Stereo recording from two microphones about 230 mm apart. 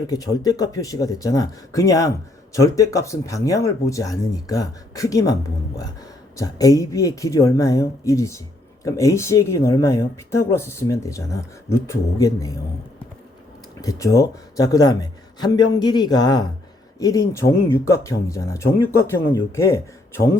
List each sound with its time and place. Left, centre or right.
0.1 s speech: centre
13.8 s speech: centre